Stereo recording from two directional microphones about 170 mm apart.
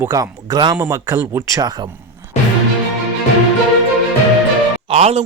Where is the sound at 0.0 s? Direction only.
20° right (ahead or behind).